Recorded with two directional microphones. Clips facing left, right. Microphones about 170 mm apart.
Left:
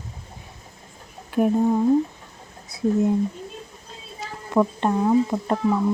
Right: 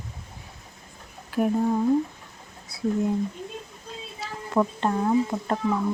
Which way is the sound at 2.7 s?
20° left (ahead or behind).